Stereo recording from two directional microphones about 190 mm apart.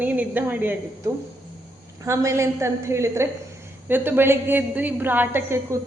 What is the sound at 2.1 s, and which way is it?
A woman's voice, 15° right (ahead or behind).